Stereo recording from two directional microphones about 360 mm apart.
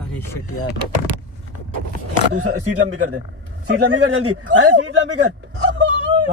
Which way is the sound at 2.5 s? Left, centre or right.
Right.